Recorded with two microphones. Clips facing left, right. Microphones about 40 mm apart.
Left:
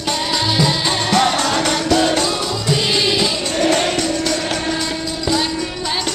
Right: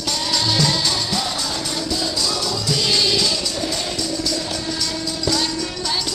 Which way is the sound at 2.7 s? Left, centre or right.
Left.